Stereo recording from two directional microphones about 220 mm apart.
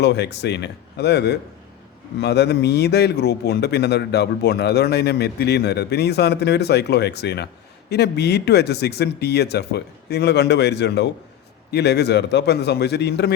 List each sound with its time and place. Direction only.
0.0 s a man's voice: 50° left (ahead or behind)